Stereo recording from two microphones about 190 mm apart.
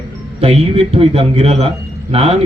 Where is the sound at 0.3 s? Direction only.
30° right (ahead or behind).